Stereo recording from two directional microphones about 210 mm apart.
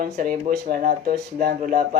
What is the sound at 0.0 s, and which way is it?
Speech, 40° right (ahead or behind).